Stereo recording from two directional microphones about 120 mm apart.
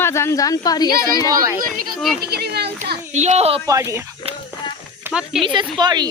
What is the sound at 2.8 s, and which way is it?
Speech, 75° right (ahead or behind).